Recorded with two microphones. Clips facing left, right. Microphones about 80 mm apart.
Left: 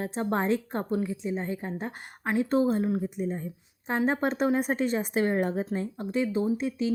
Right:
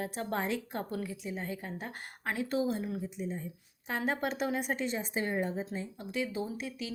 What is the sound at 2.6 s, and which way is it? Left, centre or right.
Speech, left.